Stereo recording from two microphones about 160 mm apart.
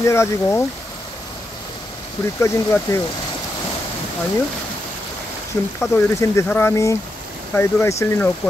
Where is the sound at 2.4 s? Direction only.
15° left (ahead or behind).